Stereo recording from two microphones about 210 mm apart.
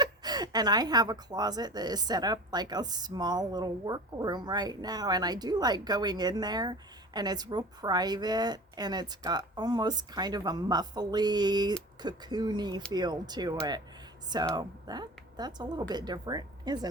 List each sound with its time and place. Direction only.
0.0 s speech: 20° right (ahead or behind)